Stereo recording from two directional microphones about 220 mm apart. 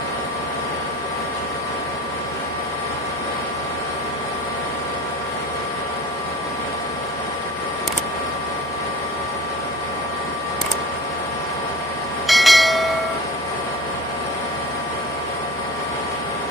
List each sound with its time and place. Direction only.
12.3 s bell: centre (ahead or behind)